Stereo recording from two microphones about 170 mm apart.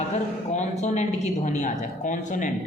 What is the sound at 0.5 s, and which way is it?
A woman's voice, 45° left (ahead or behind).